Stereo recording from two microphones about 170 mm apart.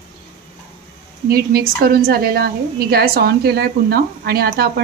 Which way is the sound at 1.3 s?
60° right (ahead or behind).